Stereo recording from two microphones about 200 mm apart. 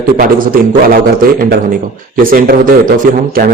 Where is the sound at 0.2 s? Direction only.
45° right (ahead or behind).